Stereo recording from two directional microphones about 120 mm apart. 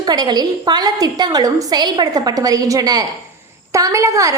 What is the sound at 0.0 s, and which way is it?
A woman's voice, 35° right (ahead or behind).